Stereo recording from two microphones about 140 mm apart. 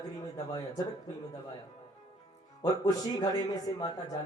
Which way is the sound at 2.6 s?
25° left (ahead or behind).